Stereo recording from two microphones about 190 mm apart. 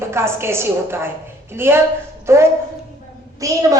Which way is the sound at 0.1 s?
15° right (ahead or behind).